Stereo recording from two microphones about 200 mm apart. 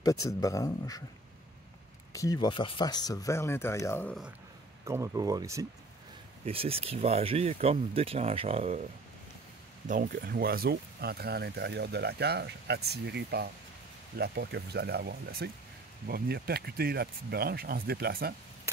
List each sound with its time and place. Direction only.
0.0 s speech: 15° left (ahead or behind)
2.1 s speech: 20° left (ahead or behind)
4.8 s speech: 15° right (ahead or behind)
6.4 s speech: 30° right (ahead or behind)
9.8 s speech: 40° right (ahead or behind)